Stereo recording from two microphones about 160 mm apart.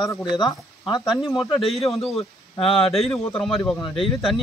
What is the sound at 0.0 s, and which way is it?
Speech, 25° left (ahead or behind).